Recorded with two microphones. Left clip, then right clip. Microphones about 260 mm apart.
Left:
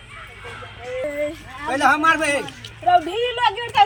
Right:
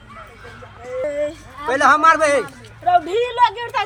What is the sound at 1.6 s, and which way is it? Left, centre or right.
Speech, centre.